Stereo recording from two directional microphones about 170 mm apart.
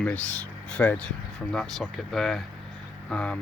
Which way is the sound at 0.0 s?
10° left (ahead or behind).